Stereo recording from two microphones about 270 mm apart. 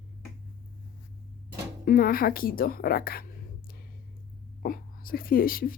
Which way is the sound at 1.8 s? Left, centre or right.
Left.